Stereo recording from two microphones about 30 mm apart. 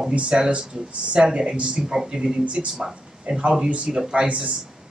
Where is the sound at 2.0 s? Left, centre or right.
Right.